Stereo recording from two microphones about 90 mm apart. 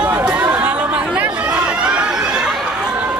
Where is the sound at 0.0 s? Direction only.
15° right (ahead or behind).